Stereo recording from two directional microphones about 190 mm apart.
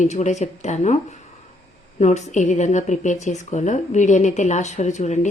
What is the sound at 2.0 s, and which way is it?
A woman's voice, 40° left (ahead or behind).